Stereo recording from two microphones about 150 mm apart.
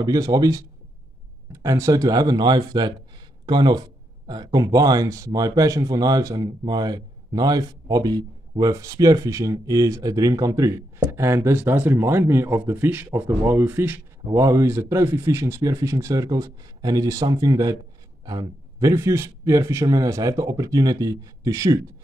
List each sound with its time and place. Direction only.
0.0 s speech: 25° right (ahead or behind)